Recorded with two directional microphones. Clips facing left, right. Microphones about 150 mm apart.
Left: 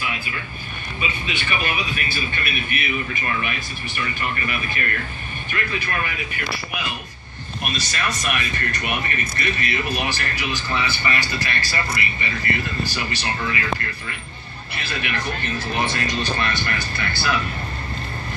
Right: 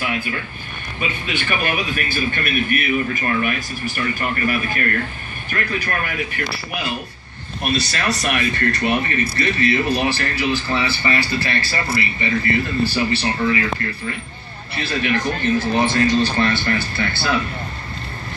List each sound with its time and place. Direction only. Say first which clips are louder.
0.0 s a sound: right 5 dB; 45° right (ahead or behind)
1.0 s a man's voice: right 4 dB; 50° right (ahead or behind)
7.6 s speech: right 5 dB; 30° right (ahead or behind)